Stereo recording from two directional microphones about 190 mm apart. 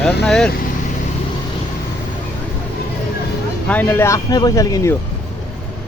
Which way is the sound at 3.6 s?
10° left (ahead or behind).